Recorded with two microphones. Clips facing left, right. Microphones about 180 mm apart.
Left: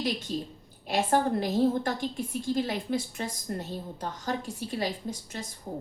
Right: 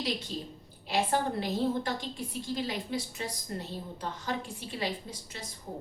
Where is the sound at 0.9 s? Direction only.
50° left (ahead or behind).